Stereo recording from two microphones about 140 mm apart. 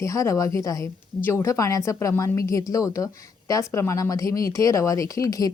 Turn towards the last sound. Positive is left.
turn(degrees=25)  # may be behind; listen again after turning